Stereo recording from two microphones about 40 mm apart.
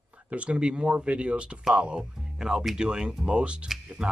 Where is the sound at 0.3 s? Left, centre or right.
Right.